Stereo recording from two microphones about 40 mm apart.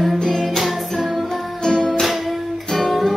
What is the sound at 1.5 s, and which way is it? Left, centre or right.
Music, centre.